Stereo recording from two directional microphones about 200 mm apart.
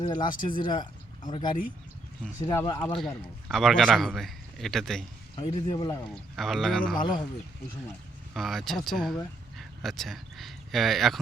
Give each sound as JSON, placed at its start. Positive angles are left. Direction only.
{"t": 0.0, "sound": "speech", "side_deg": 20}
{"t": 3.5, "sound": "a man's voice", "side_deg": 0}
{"t": 5.4, "sound": "speech", "side_deg": 20}
{"t": 6.3, "sound": "a man's voice", "side_deg": 0}
{"t": 7.0, "sound": "speech", "side_deg": 20}
{"t": 8.3, "sound": "a man's voice", "side_deg": 0}